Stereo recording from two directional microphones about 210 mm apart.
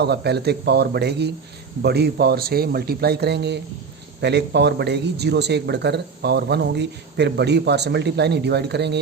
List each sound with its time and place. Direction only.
0.0 s speech: 50° right (ahead or behind)